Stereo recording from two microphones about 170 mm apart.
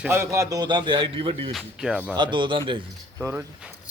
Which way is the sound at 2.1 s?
25° right (ahead or behind).